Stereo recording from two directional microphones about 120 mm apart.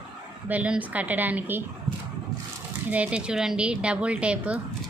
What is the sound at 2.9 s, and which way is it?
A woman's voice, 10° right (ahead or behind).